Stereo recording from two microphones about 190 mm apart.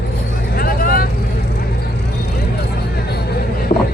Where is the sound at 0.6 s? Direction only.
50° left (ahead or behind).